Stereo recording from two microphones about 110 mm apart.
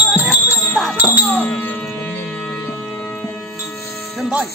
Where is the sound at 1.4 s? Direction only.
15° left (ahead or behind).